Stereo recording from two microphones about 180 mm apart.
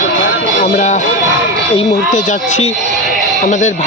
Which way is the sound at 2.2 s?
40° left (ahead or behind).